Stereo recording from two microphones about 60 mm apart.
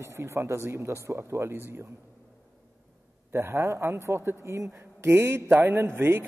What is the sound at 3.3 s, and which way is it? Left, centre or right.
A man's voice, right.